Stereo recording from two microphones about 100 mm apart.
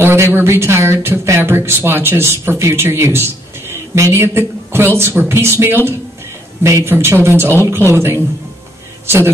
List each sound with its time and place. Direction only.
0.0 s speech: 25° right (ahead or behind)